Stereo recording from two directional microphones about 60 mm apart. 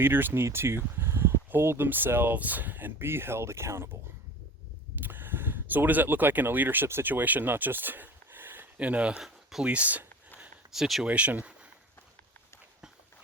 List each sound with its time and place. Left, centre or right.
0.0 s speech: right
4.9 s speech: right
8.8 s speech: right
9.2 s a sound: centre
9.6 s speech: right
10.8 s speech: centre
11.0 s speech: right